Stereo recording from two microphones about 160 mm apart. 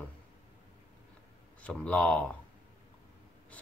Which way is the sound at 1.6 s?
10° left (ahead or behind).